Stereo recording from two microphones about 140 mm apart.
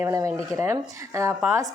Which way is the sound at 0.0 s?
20° right (ahead or behind).